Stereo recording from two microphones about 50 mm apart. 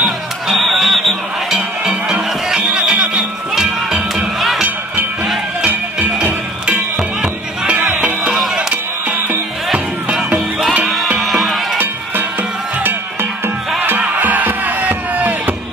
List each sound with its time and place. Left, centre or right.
0.0 s music: centre
2.5 s music: centre
3.5 s music: centre
7.6 s music: right
11.1 s music: centre
11.8 s music: right